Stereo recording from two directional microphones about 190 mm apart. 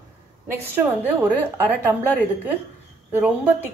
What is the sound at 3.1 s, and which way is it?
Speech, 10° right (ahead or behind).